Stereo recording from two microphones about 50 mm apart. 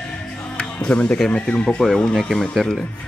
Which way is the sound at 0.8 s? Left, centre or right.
Left.